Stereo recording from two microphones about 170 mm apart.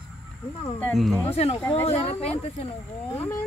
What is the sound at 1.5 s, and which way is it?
Speech, 15° left (ahead or behind).